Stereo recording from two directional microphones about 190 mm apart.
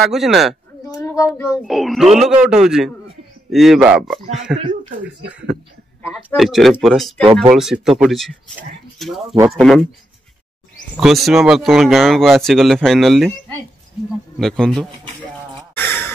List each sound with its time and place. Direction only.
0.0 s speech: centre (ahead or behind)
0.9 s a child's voice: 15° left (ahead or behind)
1.6 s speech: centre (ahead or behind)
6.1 s speech: centre (ahead or behind)
11.0 s speech: centre (ahead or behind)
14.4 s speech: 5° left (ahead or behind)
15.7 s a sound: 10° left (ahead or behind)